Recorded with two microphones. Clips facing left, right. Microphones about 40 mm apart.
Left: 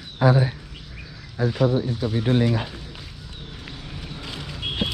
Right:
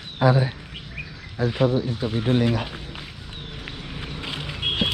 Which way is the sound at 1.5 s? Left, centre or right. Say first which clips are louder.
Even; right.